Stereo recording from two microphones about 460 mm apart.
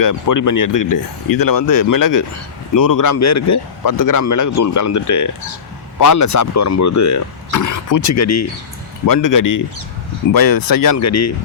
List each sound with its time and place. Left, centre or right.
0.0 s a man's voice: left